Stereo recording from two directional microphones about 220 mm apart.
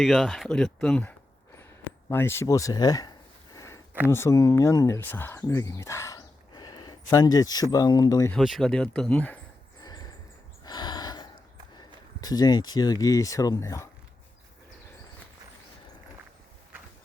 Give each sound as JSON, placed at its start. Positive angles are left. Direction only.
{"t": 0.0, "sound": "speech", "side_deg": 0}
{"t": 2.0, "sound": "a sound", "side_deg": 10}
{"t": 4.1, "sound": "speech", "side_deg": 15}
{"t": 8.3, "sound": "speech", "side_deg": 0}
{"t": 9.8, "sound": "a sound", "side_deg": 15}
{"t": 10.6, "sound": "gasp", "side_deg": 20}
{"t": 11.8, "sound": "speech", "side_deg": 15}